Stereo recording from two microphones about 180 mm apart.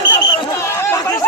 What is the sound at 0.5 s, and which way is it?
Chatter, 15° left (ahead or behind).